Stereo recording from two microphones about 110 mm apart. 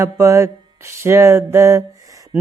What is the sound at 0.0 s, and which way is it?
Mantra, 25° right (ahead or behind).